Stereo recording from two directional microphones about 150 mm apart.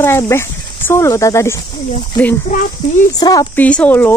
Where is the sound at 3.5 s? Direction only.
10° left (ahead or behind).